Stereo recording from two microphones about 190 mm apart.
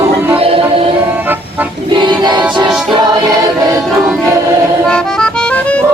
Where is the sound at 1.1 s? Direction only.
10° right (ahead or behind).